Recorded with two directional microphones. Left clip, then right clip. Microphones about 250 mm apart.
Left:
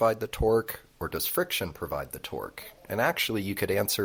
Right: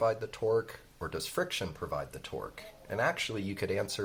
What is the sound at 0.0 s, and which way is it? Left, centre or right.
Speech, left.